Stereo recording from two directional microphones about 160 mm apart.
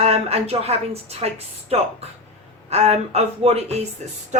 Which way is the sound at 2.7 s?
40° right (ahead or behind).